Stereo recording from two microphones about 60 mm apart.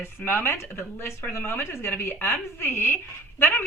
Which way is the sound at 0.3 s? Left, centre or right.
Left.